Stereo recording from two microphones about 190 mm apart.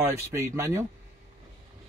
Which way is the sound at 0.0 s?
15° right (ahead or behind).